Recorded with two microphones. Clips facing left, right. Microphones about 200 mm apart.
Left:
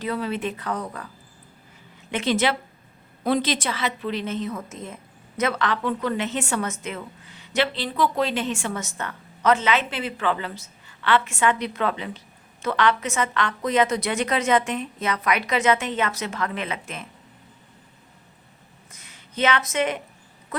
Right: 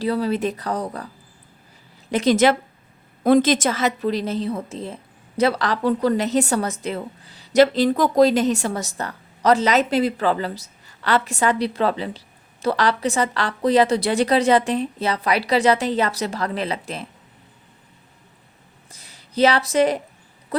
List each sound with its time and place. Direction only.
0.0 s a woman's voice: 35° right (ahead or behind)
2.0 s a woman's voice: 40° right (ahead or behind)
18.9 s a woman's voice: 35° right (ahead or behind)